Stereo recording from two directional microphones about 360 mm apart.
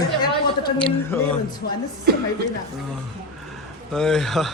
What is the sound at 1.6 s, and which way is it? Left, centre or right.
Speech, left.